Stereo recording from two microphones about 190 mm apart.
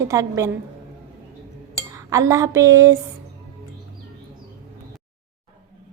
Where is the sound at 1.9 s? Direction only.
15° right (ahead or behind).